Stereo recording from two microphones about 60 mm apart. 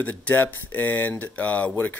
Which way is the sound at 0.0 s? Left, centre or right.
Left.